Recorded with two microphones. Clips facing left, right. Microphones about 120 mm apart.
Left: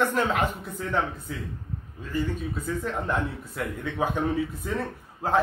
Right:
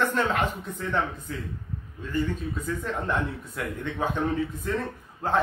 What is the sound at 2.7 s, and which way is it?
A man's voice, centre (ahead or behind).